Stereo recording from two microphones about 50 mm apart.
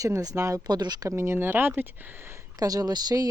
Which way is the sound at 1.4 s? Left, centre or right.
Right.